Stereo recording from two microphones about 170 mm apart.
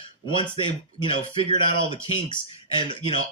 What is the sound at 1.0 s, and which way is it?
Speech, 30° left (ahead or behind).